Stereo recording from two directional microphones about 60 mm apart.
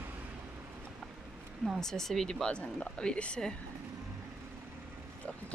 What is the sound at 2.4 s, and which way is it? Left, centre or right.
Speech, centre.